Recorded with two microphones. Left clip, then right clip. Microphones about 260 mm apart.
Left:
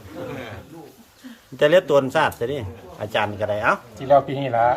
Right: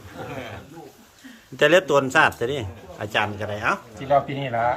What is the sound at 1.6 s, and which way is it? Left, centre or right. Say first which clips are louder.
A man's voice: left 1 dB; centre.